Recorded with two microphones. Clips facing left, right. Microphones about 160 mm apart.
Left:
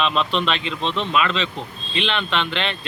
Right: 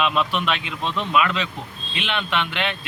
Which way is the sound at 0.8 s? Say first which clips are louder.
Left 2 dB; 25° left (ahead or behind).